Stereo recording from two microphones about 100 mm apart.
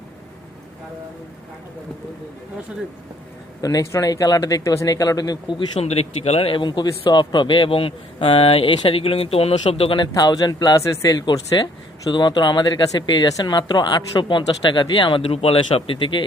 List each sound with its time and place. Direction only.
3.6 s speech: 40° left (ahead or behind)
5.8 s speech: 90° left
6.6 s speech: 45° left (ahead or behind); by 10.0 s 65° left (ahead or behind)
10.0 s speech: 45° left (ahead or behind)
15.2 s speech: 75° left (ahead or behind); by 16.2 s 55° left (ahead or behind)